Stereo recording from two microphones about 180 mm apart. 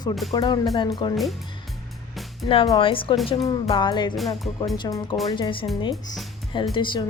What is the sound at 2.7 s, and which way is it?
Speech, 30° left (ahead or behind).